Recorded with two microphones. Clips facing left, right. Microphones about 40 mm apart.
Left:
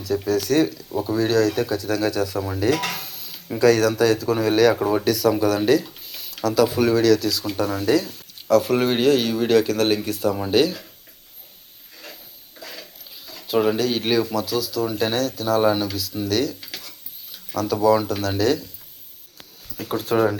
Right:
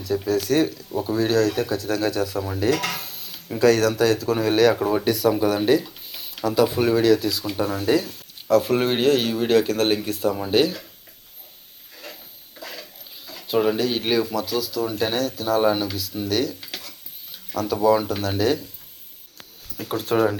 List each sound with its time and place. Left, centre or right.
0.0 s speech: centre
4.7 s speech: centre
5.0 s speech: centre
12.5 s a sound: centre
13.7 s speech: centre
19.7 s speech: centre